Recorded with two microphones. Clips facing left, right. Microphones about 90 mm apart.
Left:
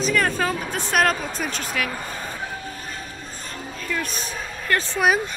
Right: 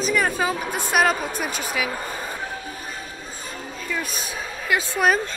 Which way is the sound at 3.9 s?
5° right (ahead or behind).